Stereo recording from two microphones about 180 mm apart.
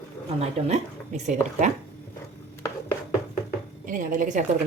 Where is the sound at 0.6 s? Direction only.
30° right (ahead or behind).